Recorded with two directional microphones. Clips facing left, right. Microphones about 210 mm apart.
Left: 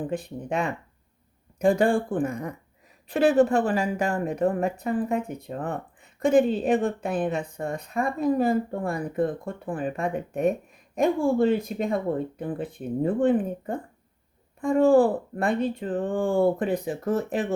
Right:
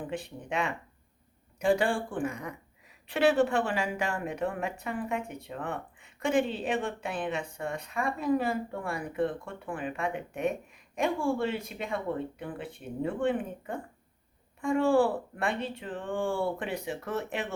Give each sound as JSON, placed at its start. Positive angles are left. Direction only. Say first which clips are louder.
{"t": 0.1, "sound": "a woman's voice", "louder": "left 6 dB", "side_deg": 40}